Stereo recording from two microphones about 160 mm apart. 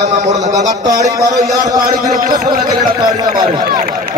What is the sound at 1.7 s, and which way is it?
Speech, 60° right (ahead or behind).